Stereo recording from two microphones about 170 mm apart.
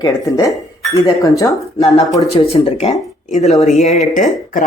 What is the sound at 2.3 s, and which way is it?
Speech, 35° left (ahead or behind).